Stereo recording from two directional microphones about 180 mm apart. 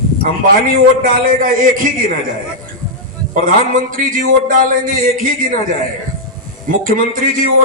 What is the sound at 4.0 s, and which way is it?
Speech, 50° right (ahead or behind).